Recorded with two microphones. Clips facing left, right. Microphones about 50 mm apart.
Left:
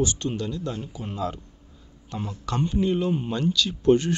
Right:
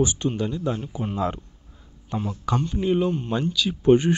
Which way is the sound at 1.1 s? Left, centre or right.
Right.